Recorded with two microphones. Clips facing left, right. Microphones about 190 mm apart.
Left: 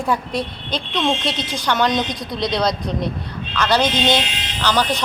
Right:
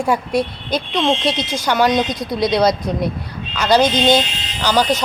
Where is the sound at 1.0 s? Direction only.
20° right (ahead or behind).